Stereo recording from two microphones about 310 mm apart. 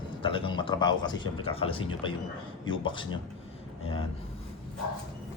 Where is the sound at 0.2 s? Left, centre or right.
Centre.